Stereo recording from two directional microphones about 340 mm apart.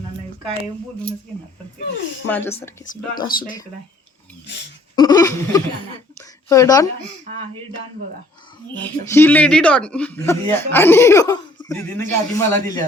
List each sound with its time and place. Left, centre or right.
2.2 s a man's voice: centre
2.9 s speech: left
4.9 s a man's voice: centre
6.1 s a sound: centre
8.8 s a man's voice: centre